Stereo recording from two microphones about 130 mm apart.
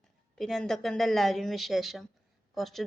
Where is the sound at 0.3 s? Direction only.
5° left (ahead or behind).